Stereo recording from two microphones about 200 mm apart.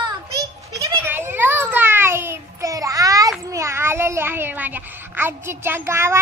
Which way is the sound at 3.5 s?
15° right (ahead or behind).